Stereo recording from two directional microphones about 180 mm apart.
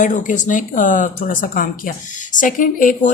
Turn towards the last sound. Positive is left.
turn(degrees=50)  # may be behind; listen again after turning